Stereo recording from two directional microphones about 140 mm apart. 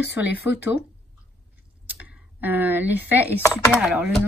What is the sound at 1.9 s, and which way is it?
A woman's voice, 10° right (ahead or behind).